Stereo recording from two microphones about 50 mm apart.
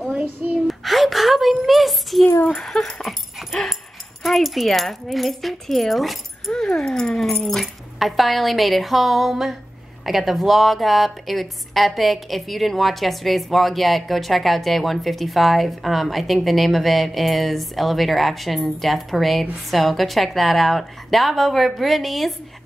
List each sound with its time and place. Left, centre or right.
0.7 s gasp: centre
1.7 s a child's voice: centre
2.4 s dog: centre
4.2 s a woman's voice: centre
6.5 s dog: centre
7.6 s a woman's voice: centre